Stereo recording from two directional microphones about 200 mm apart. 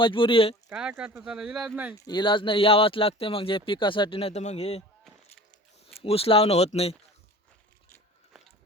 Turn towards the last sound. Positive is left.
turn(degrees=30)  # may be behind; listen again after turning